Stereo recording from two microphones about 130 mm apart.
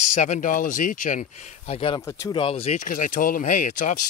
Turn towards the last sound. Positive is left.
turn(degrees=75)  # may be behind; listen again after turning